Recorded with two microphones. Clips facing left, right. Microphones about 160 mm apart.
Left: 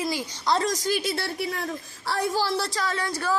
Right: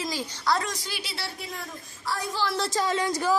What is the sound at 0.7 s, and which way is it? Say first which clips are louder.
A woman's voice: left 10 dB; 40° left (ahead or behind).